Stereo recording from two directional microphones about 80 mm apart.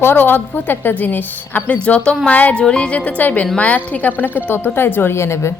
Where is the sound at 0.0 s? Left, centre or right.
Left.